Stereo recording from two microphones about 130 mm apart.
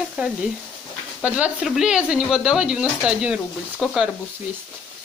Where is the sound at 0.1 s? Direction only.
5° right (ahead or behind).